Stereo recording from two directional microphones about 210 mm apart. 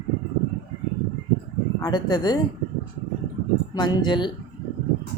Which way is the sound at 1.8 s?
20° left (ahead or behind).